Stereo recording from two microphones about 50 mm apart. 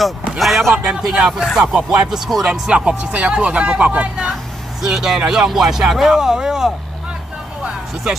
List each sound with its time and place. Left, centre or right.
0.4 s a sound: centre
0.8 s speech: centre
1.7 s speech: centre
2.6 s speech: centre
4.8 s speech: centre